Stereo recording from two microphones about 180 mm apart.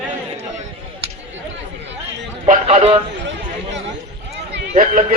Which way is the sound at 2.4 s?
35° right (ahead or behind).